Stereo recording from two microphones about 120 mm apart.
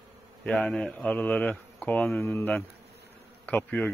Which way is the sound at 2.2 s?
20° left (ahead or behind).